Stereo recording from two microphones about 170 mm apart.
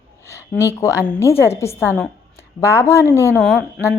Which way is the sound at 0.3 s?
15° left (ahead or behind).